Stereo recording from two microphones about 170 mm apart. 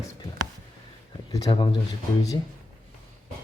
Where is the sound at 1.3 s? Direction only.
30° left (ahead or behind).